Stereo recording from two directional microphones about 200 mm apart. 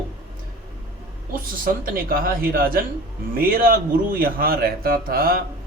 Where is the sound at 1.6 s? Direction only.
45° right (ahead or behind).